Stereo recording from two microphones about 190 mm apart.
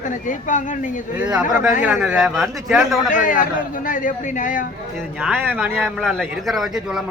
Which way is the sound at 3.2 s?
45° left (ahead or behind).